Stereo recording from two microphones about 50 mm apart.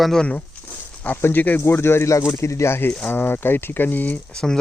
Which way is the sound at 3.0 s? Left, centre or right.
Left.